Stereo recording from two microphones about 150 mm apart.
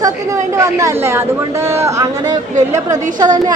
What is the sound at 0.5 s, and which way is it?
Speech, 20° right (ahead or behind).